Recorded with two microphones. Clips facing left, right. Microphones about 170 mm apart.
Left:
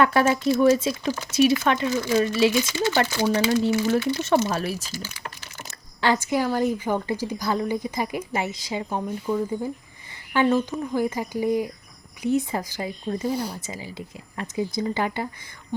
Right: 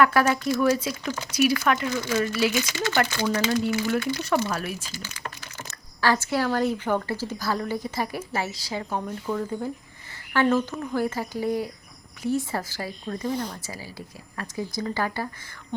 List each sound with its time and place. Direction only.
0.0 s speech: 25° left (ahead or behind)
6.0 s a woman's voice: 15° left (ahead or behind)
9.3 s speech: 5° right (ahead or behind)
10.3 s a woman's voice: 15° left (ahead or behind)
13.3 s a woman's voice: 10° left (ahead or behind)
13.6 s speech: 20° left (ahead or behind)